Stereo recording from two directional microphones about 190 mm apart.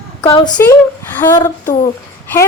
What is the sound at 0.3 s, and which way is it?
Speech, 25° left (ahead or behind).